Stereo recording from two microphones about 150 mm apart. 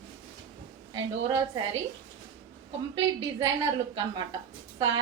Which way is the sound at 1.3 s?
20° right (ahead or behind).